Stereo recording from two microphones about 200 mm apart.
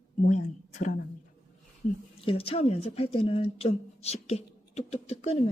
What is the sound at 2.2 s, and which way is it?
A woman's voice, 30° left (ahead or behind).